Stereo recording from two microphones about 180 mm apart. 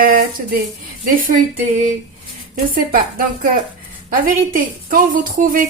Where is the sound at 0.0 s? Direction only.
50° right (ahead or behind).